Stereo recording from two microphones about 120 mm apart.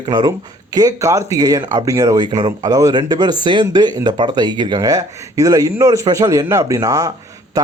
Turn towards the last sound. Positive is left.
turn(degrees=-30)  # may be behind; listen again after turning